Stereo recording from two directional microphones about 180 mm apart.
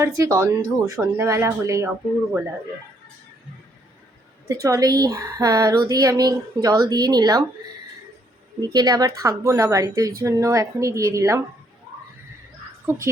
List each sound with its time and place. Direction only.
0.0 s speech: 15° right (ahead or behind)
4.6 s speech: 20° right (ahead or behind)
8.6 s speech: 20° right (ahead or behind)